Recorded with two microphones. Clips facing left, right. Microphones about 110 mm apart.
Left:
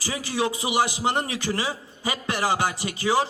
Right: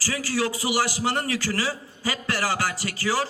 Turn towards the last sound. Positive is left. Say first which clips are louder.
# left 3 dB
turn(degrees=20)  # may be behind; listen again after turning